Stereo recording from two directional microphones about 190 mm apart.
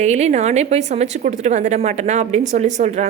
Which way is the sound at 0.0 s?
35° right (ahead or behind).